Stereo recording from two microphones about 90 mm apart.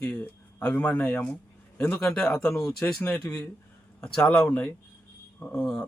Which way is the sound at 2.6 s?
25° left (ahead or behind).